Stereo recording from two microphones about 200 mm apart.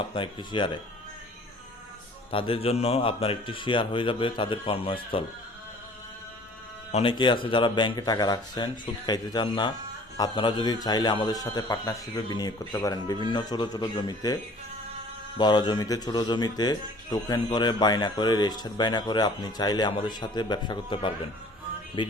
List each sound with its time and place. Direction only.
0.1 s speech: 25° left (ahead or behind)
2.3 s speech: 30° left (ahead or behind)
6.9 s speech: 25° left (ahead or behind)
15.4 s speech: 20° left (ahead or behind)